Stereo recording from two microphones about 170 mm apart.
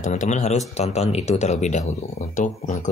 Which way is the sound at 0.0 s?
45° left (ahead or behind).